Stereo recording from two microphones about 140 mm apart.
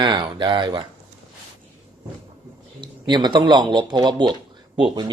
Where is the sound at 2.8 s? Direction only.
30° right (ahead or behind).